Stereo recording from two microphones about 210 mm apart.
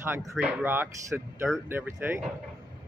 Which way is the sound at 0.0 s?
10° right (ahead or behind).